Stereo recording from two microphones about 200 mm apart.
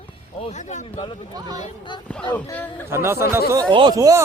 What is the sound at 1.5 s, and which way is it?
Speech, 25° left (ahead or behind).